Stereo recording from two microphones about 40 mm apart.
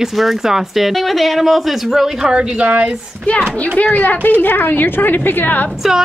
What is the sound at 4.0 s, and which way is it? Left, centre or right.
A woman's voice, left.